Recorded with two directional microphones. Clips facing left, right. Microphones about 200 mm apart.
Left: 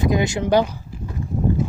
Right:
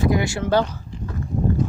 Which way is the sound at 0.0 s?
20° left (ahead or behind).